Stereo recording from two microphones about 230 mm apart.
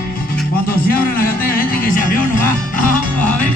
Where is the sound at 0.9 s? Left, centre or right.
Left.